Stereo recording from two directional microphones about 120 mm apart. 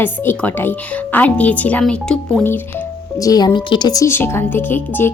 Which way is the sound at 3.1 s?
30° left (ahead or behind).